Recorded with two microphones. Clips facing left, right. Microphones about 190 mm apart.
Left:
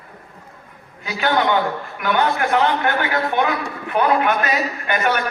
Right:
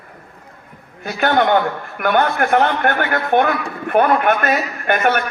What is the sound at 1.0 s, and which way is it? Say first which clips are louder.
A man's voice: right 3 dB; 55° right (ahead or behind).